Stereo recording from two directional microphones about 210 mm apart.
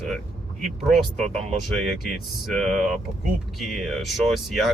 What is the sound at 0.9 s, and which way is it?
Speech, centre (ahead or behind).